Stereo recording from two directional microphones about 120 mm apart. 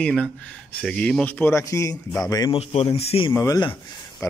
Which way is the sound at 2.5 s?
55° left (ahead or behind).